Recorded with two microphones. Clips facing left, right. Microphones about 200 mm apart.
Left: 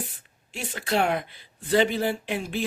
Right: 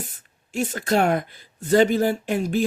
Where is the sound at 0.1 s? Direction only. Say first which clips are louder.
Right 9 dB; 45° right (ahead or behind).